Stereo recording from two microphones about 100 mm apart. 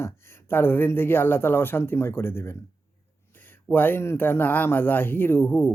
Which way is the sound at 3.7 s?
20° left (ahead or behind).